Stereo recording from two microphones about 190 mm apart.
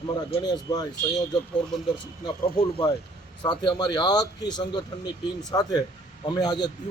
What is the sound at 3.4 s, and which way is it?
Speech, 25° left (ahead or behind).